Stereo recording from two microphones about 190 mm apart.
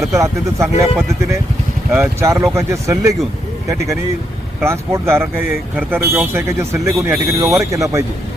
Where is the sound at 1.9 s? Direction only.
15° right (ahead or behind).